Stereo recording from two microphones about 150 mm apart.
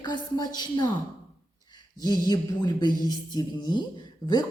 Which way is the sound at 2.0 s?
25° left (ahead or behind).